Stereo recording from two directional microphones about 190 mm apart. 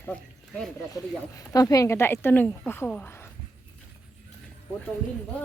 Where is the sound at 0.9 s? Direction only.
20° left (ahead or behind).